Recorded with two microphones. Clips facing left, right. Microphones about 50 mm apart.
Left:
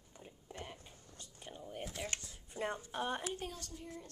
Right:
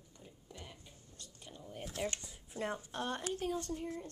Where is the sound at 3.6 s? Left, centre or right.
Right.